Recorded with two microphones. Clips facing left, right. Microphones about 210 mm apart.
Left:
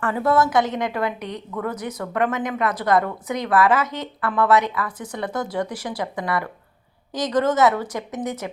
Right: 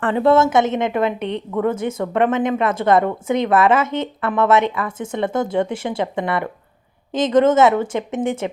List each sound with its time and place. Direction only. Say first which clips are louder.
0.0 s a woman's voice: right 5 dB; 25° right (ahead or behind)